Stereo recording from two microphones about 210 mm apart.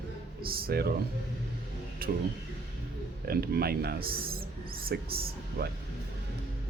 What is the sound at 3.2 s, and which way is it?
Speech, 45° right (ahead or behind).